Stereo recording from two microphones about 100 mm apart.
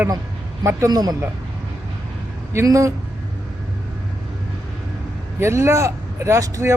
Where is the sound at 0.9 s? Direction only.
40° right (ahead or behind).